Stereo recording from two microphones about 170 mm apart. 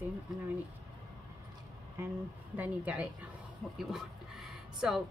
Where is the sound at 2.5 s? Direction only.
10° right (ahead or behind).